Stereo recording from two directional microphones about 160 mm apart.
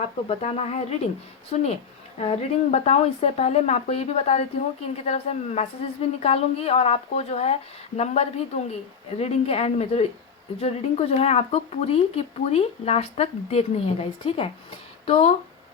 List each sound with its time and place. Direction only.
0.3 s speech: 40° left (ahead or behind)